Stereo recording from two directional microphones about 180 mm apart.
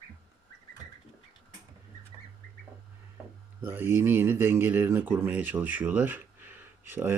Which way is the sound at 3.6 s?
10° right (ahead or behind).